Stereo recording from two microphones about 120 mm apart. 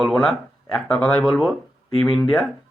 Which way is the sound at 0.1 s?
5° left (ahead or behind).